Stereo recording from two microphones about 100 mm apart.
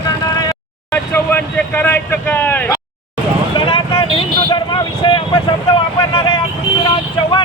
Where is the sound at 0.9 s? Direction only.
20° left (ahead or behind).